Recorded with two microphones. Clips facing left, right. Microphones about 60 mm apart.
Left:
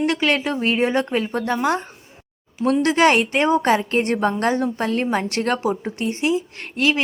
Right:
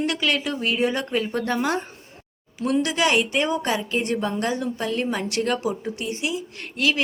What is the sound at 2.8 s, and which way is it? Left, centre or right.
A woman's voice, left.